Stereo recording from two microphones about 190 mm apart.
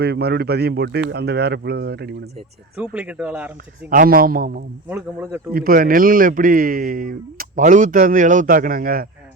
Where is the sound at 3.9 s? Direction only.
50° right (ahead or behind).